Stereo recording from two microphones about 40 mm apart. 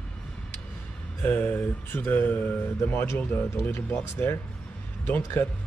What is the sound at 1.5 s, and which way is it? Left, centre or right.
Speech, left.